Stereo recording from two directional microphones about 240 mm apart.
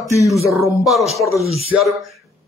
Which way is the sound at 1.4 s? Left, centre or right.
Right.